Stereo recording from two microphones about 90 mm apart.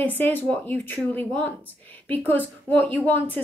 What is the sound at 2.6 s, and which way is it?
Speech, 20° left (ahead or behind).